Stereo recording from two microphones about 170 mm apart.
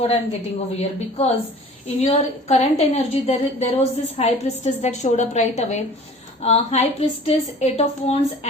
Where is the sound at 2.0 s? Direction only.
40° left (ahead or behind).